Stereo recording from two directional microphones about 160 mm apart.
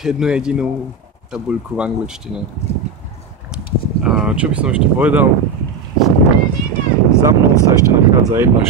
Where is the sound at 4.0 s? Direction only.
5° right (ahead or behind).